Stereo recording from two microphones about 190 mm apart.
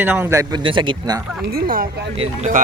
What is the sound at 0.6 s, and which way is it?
Speech, 25° right (ahead or behind).